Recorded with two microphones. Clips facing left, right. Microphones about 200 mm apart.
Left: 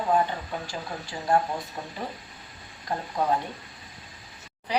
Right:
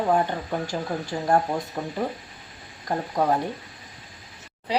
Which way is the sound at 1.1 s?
45° right (ahead or behind).